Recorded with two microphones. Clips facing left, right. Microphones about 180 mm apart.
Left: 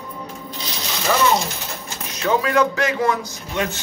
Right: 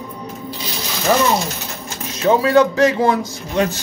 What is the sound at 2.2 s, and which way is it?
A man's voice, 30° right (ahead or behind).